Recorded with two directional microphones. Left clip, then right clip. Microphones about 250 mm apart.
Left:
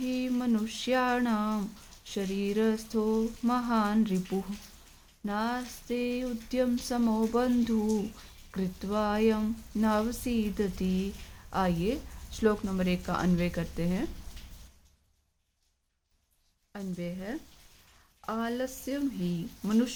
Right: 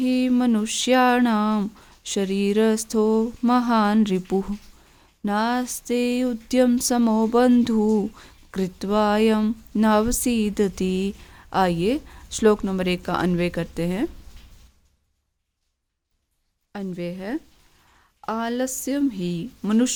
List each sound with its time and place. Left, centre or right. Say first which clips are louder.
0.0 s speech: right 10 dB; right
16.7 s speech: right 8 dB; right